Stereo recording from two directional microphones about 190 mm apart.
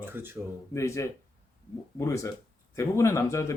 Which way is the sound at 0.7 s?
15° left (ahead or behind).